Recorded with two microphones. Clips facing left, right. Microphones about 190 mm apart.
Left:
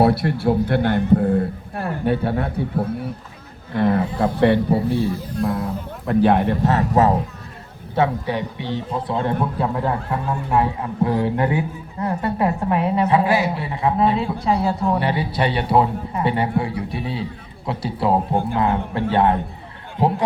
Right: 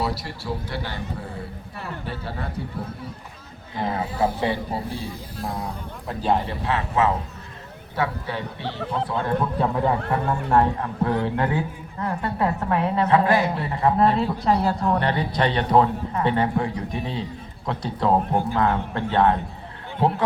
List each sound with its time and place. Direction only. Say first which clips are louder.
0.0 s speech: left 11 dB; 60° left (ahead or behind)
6.1 s a man's voice: left 7 dB; 60° left (ahead or behind); by 7.2 s 40° left (ahead or behind)
7.9 s a woman's voice: left 6 dB; 20° left (ahead or behind)
10.1 s speech: right 1 dB; 5° left (ahead or behind)
10.8 s a woman's voice: left 3 dB; 15° left (ahead or behind)